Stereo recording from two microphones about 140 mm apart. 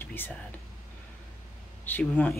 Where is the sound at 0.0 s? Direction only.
15° left (ahead or behind).